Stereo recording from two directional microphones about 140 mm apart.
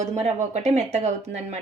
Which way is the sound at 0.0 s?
55° right (ahead or behind).